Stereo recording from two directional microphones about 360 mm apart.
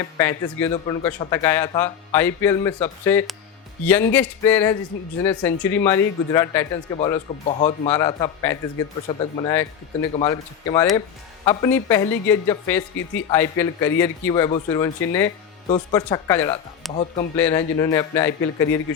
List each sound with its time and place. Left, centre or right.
0.2 s a man's voice: centre
16.9 s a man's voice: centre